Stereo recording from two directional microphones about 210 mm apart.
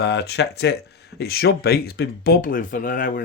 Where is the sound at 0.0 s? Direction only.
55° left (ahead or behind).